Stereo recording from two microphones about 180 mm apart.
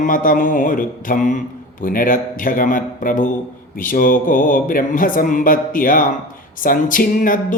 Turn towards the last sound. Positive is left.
turn(degrees=50)  # may be behind; listen again after turning